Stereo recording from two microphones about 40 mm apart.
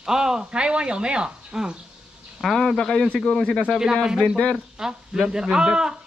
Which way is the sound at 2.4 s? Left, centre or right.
Centre.